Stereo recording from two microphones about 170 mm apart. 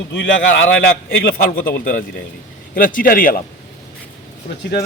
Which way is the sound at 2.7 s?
55° left (ahead or behind).